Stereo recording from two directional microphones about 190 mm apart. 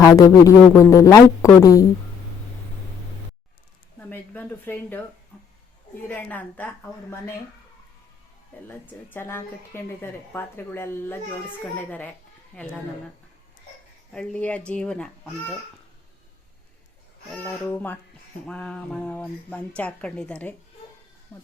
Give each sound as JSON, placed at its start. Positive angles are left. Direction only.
{"t": 0.0, "sound": "a woman's voice", "side_deg": 15}
{"t": 4.1, "sound": "a woman's voice", "side_deg": 10}
{"t": 8.6, "sound": "a woman's voice", "side_deg": 10}
{"t": 14.1, "sound": "speech", "side_deg": 5}
{"t": 17.3, "sound": "a woman's voice", "side_deg": 10}